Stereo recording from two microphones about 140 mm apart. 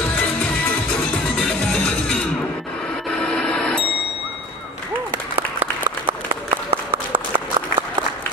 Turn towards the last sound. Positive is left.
turn(degrees=-40)  # may be behind; listen again after turning